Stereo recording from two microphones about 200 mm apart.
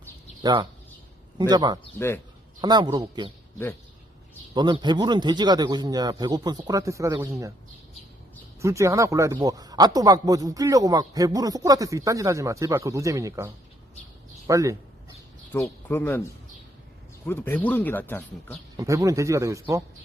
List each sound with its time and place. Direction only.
0.4 s a man's voice: 20° right (ahead or behind)
2.0 s speech: 10° left (ahead or behind)
2.6 s a man's voice: 20° right (ahead or behind)
4.5 s a man's voice: 20° right (ahead or behind)
8.6 s speech: 15° right (ahead or behind)
15.5 s speech: 10° left (ahead or behind)
18.8 s speech: 15° right (ahead or behind)